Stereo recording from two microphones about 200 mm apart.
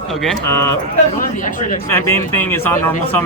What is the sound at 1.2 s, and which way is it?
Speech, 40° left (ahead or behind).